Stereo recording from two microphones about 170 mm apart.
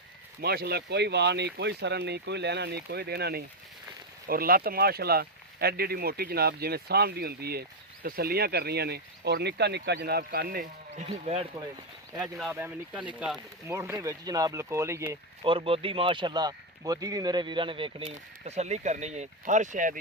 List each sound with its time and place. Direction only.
0.4 s speech: 70° right (ahead or behind)
4.3 s speech: 60° right (ahead or behind); by 11.4 s 40° right (ahead or behind)
12.2 s speech: 10° right (ahead or behind)
13.7 s speech: 15° right (ahead or behind)
15.4 s speech: 35° right (ahead or behind); by 20.0 s 50° right (ahead or behind)